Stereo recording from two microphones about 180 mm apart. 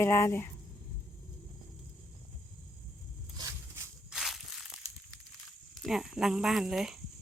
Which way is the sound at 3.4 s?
15° right (ahead or behind).